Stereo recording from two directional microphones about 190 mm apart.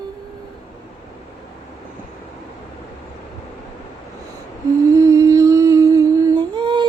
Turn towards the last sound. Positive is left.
turn(degrees=-25)  # may be behind; listen again after turning